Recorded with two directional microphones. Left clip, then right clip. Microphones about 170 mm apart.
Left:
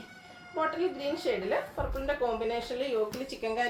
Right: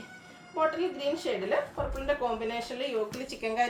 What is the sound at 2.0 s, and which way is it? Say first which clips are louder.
Speech: even; 15° right (ahead or behind).